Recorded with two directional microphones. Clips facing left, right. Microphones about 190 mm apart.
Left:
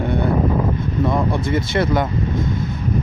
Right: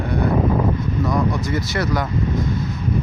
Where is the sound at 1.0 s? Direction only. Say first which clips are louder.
Left 2 dB; 25° left (ahead or behind).